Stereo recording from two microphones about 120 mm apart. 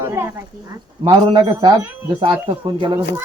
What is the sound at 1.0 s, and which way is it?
Speech, 35° right (ahead or behind).